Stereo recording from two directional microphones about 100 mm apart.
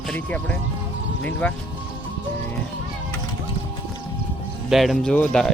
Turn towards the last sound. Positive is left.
turn(degrees=5)  # may be behind; listen again after turning